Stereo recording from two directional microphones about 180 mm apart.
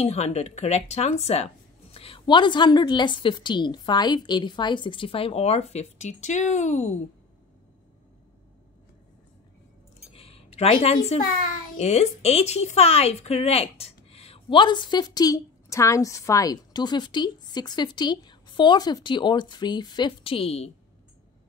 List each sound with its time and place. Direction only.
0.0 s speech: 35° left (ahead or behind)
10.1 s a sound: 35° left (ahead or behind)
11.5 s speech: 45° left (ahead or behind)